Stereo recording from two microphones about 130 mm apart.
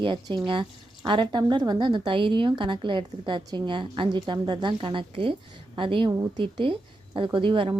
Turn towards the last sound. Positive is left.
turn(degrees=-40)  # may be behind; listen again after turning